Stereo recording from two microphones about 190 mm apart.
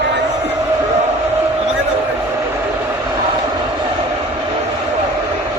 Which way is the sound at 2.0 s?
10° right (ahead or behind).